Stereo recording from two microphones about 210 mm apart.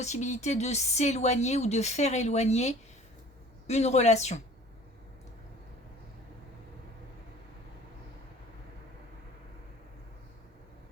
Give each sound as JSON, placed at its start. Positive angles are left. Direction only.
{"t": 0.0, "sound": "speech", "side_deg": 35}